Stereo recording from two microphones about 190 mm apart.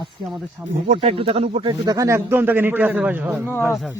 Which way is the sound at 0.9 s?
30° right (ahead or behind).